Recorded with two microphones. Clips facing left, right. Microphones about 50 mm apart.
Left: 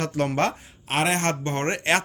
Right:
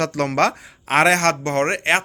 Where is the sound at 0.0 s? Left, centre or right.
Right.